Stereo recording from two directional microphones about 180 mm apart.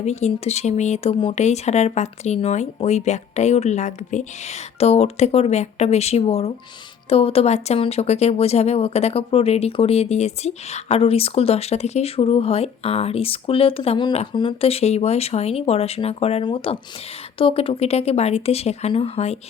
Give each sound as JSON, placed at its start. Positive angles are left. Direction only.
{"t": 0.0, "sound": "speech", "side_deg": 40}